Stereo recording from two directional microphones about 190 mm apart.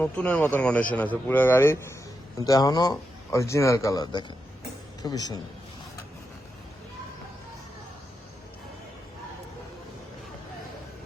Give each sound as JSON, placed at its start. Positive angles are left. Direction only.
{"t": 0.0, "sound": "a man's voice", "side_deg": 5}